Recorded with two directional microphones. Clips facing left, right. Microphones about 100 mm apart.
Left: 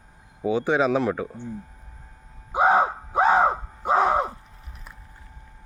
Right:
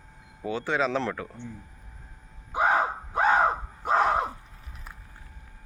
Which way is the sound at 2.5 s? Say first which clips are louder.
Left 5 dB; 20° left (ahead or behind).